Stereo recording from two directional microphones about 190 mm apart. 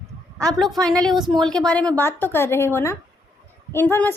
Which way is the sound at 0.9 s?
Centre (ahead or behind).